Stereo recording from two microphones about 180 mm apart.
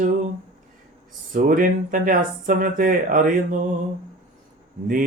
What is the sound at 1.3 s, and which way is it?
Mantra, 50° right (ahead or behind).